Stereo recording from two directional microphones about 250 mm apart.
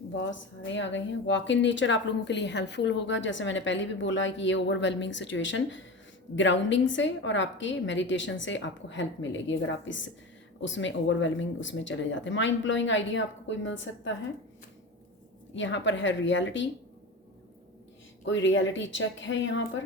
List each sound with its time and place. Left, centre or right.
0.2 s speech: left
15.5 s speech: left
18.3 s speech: left